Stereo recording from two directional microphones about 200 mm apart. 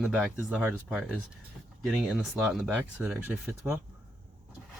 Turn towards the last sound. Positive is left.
turn(degrees=-10)  # may be behind; listen again after turning